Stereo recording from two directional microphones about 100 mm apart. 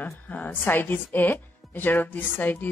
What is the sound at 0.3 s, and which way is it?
A woman's voice, 20° left (ahead or behind).